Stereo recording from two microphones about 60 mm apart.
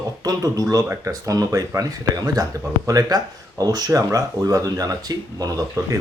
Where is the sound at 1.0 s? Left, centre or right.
Right.